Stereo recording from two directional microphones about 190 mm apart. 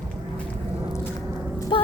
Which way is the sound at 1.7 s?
25° left (ahead or behind).